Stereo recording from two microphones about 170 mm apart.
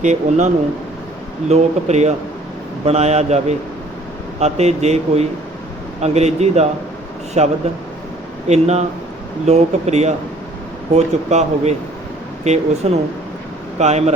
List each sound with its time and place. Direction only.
0.0 s a man's voice: 45° right (ahead or behind)